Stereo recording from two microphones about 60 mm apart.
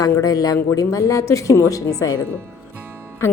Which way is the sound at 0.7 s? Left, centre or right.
Left.